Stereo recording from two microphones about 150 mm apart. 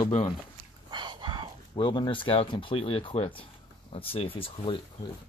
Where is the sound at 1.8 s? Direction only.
35° left (ahead or behind).